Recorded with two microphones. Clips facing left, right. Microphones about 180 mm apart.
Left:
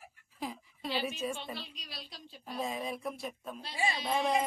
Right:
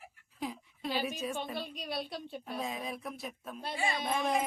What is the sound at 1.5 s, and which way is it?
Speech, 50° right (ahead or behind).